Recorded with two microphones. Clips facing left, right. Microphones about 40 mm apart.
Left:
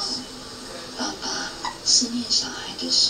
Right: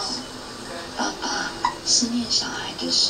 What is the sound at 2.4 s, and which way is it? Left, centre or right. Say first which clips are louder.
Speech: right 3 dB; right.